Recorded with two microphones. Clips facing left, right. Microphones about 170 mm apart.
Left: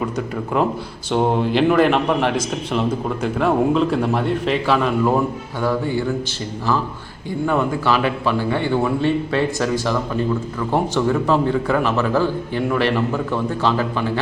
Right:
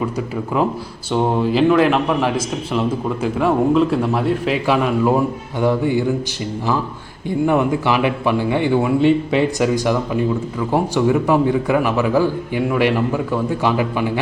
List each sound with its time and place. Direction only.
1.1 s a man's voice: centre (ahead or behind); by 6.1 s 15° right (ahead or behind)
7.4 s a man's voice: 15° right (ahead or behind)